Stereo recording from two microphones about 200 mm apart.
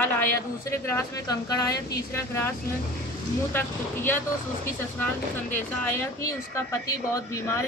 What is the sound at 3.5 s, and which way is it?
Speech, 10° left (ahead or behind).